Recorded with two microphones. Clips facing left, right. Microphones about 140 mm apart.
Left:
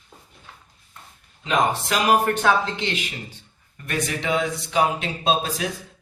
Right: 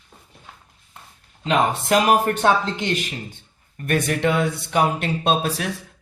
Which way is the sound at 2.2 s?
45° right (ahead or behind).